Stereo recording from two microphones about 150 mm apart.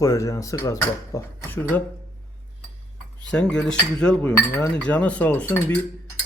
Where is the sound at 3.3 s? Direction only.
5° left (ahead or behind).